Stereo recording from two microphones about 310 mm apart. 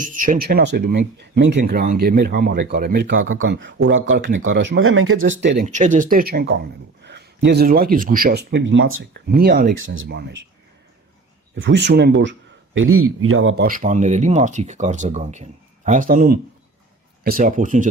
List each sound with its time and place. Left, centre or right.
0.0 s speech: right
5.6 s speech: right
11.5 s speech: right
13.7 s speech: right